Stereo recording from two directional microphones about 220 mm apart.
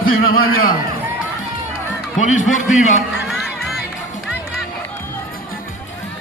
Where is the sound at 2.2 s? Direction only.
35° left (ahead or behind).